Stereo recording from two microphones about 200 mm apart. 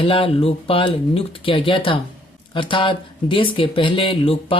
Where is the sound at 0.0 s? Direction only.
25° left (ahead or behind).